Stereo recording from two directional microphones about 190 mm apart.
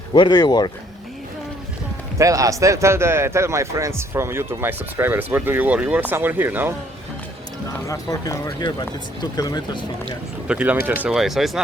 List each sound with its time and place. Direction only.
0.1 s speech: 25° left (ahead or behind)
2.1 s speech: 15° right (ahead or behind)
7.9 s speech: 20° left (ahead or behind)
10.5 s speech: 5° right (ahead or behind)